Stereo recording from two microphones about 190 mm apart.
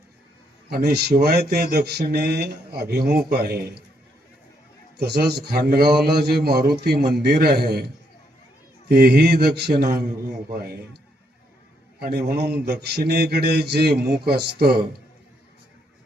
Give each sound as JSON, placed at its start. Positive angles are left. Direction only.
{"t": 0.7, "sound": "speech", "side_deg": -55}
{"t": 4.9, "sound": "speech", "side_deg": -60}
{"t": 8.9, "sound": "speech", "side_deg": -55}
{"t": 11.9, "sound": "speech", "side_deg": -55}